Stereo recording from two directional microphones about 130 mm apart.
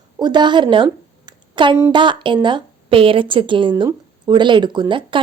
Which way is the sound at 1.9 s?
40° right (ahead or behind).